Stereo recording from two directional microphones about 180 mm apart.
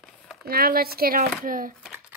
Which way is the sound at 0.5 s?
55° right (ahead or behind).